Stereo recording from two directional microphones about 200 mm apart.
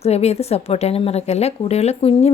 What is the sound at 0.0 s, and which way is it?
A woman's voice, 30° left (ahead or behind).